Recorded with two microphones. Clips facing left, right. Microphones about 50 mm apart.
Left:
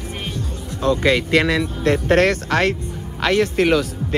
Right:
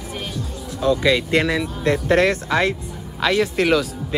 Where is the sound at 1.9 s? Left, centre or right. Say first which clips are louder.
Left 1 dB; left.